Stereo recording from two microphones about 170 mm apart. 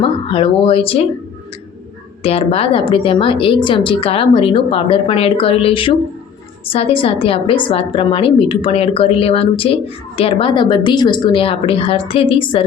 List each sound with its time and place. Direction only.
0.0 s a woman's voice: 30° left (ahead or behind)
2.2 s a woman's voice: 35° left (ahead or behind)